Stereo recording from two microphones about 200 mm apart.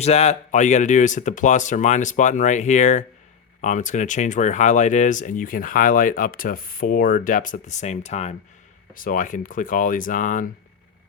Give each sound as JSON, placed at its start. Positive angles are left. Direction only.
{"t": 0.0, "sound": "speech", "side_deg": 30}